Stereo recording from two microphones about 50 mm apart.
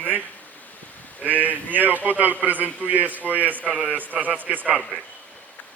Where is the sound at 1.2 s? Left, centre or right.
Right.